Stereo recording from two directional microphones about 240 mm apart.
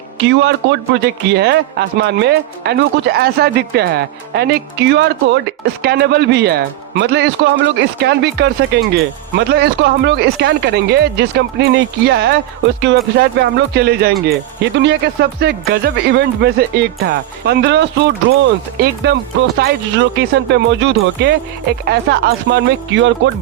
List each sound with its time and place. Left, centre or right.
0.2 s a man's voice: right